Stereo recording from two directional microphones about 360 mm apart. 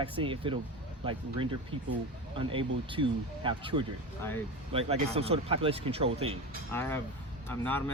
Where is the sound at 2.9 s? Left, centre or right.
Centre.